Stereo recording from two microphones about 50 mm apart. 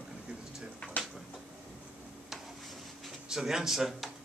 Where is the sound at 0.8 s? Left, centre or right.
Left.